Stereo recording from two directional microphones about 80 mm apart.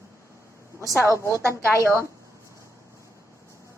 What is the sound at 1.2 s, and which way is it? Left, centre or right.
Speech, right.